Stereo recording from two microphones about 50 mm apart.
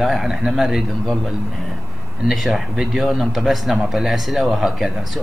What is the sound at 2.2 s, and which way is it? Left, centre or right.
Speech, centre.